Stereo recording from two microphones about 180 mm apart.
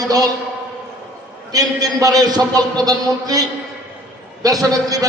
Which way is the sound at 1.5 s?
20° right (ahead or behind).